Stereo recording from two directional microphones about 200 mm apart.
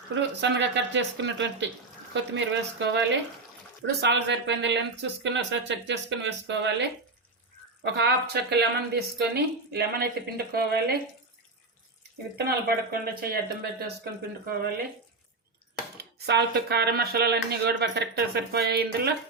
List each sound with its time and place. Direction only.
0.1 s speech: 60° right (ahead or behind)
7.9 s speech: 55° right (ahead or behind)
12.5 s speech: 50° right (ahead or behind)
16.0 s speech: 55° right (ahead or behind)